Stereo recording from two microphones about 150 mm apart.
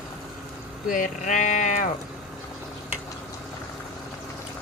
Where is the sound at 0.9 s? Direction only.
60° left (ahead or behind).